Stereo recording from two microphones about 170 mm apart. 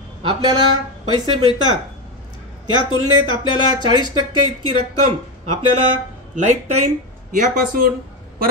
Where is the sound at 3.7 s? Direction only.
25° right (ahead or behind).